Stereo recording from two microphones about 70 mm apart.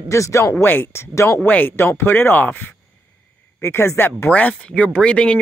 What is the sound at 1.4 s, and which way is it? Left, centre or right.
Speech, left.